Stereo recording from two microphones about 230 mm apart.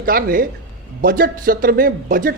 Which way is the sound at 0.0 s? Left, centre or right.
Right.